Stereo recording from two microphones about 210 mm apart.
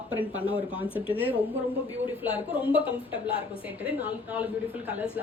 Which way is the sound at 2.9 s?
25° left (ahead or behind).